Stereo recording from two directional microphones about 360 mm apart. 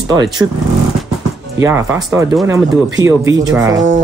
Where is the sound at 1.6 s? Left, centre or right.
Centre.